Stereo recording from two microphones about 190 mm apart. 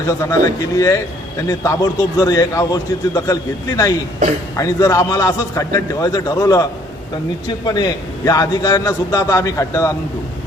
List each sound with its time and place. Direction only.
0.1 s a man's voice: 15° left (ahead or behind)